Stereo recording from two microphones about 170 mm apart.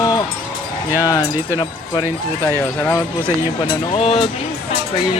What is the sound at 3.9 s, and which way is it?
Speech, 35° left (ahead or behind).